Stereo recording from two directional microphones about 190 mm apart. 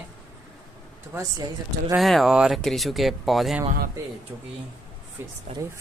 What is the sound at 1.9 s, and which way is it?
Speech, centre (ahead or behind).